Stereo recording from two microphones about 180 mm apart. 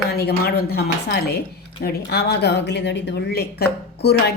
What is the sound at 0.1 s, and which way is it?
Speech, 60° left (ahead or behind).